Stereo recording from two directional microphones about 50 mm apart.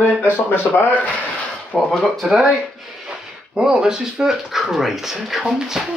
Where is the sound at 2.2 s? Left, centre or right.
Right.